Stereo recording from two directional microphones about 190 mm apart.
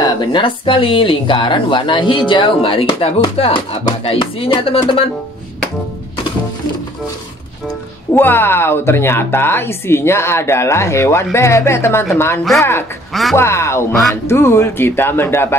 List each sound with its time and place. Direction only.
0.0 s speech: 25° left (ahead or behind)
8.1 s speech: 10° left (ahead or behind)
13.1 s speech: centre (ahead or behind)
13.4 s speech: 15° left (ahead or behind)